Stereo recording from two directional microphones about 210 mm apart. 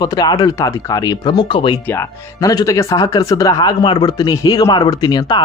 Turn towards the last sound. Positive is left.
turn(degrees=20)  # may be behind; listen again after turning